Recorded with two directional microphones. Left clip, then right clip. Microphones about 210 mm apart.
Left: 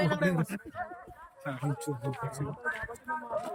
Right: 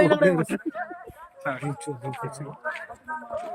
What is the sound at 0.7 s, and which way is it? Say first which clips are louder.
Speech: right 6 dB; 25° right (ahead or behind).